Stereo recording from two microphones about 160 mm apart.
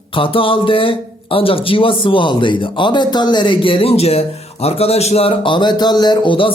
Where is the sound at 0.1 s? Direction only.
35° left (ahead or behind).